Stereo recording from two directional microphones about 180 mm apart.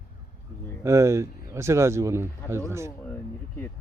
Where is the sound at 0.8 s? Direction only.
15° right (ahead or behind).